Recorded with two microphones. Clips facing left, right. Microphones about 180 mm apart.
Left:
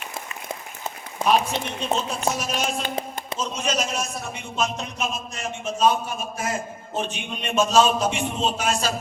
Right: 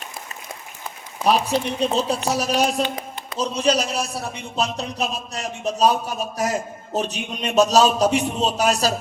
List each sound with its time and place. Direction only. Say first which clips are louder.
1.2 s a man's voice: right 2 dB; 35° right (ahead or behind)